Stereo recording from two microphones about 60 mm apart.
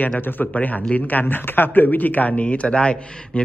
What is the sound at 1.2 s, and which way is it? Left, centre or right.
Speech, left.